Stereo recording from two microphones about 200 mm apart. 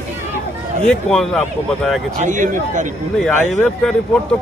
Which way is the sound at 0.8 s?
5° left (ahead or behind).